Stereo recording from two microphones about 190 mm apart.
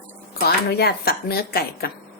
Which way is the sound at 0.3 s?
55° left (ahead or behind).